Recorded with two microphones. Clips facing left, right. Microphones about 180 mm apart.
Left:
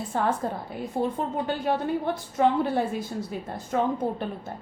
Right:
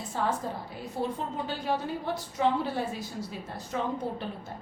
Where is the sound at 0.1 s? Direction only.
55° left (ahead or behind).